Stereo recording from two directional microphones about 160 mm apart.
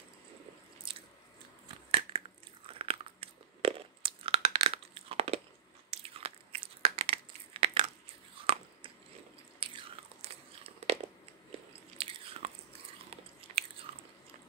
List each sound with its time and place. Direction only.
1.9 s biting: 35° right (ahead or behind)
5.9 s crunch: 35° right (ahead or behind)
9.6 s biting: 35° right (ahead or behind)
12.0 s biting: 35° right (ahead or behind)